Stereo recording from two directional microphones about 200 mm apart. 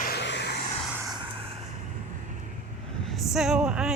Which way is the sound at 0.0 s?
55° left (ahead or behind).